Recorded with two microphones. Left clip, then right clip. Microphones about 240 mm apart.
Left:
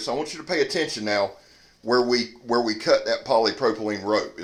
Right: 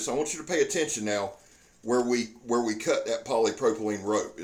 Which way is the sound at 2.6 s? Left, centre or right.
Left.